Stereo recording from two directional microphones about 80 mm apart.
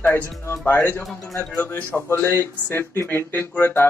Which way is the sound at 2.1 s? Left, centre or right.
Left.